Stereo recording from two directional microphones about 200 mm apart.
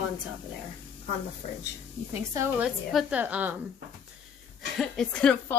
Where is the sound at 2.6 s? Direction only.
Centre (ahead or behind).